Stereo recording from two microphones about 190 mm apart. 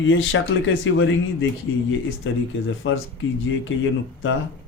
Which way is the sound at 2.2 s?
80° left.